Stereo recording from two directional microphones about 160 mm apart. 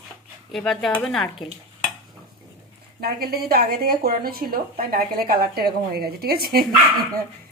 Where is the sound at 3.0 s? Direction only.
75° right (ahead or behind).